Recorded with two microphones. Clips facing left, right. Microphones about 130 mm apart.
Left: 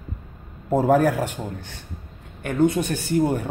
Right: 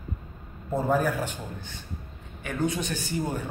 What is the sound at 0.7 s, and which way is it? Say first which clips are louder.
A man's voice: left 7 dB; 80° left.